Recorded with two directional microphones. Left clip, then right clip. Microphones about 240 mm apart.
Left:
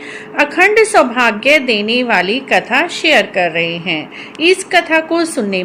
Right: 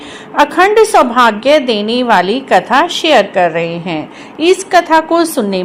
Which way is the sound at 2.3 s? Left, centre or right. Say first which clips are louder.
Right 2 dB; right.